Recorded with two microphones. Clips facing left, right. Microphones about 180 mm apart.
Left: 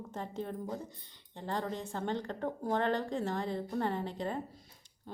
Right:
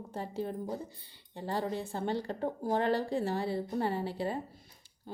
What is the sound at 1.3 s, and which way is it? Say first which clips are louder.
Speech: right 3 dB; 10° right (ahead or behind).